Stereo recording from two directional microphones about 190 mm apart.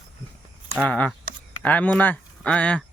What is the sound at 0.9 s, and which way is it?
Speech, 5° left (ahead or behind).